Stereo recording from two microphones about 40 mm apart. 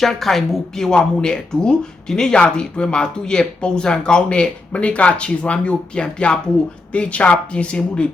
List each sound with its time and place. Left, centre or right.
0.0 s a woman's voice: centre; by 8.0 s left